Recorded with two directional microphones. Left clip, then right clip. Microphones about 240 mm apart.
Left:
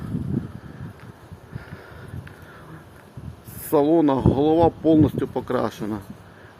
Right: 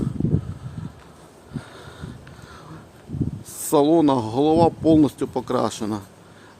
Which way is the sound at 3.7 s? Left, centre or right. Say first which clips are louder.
Right 1 dB; centre.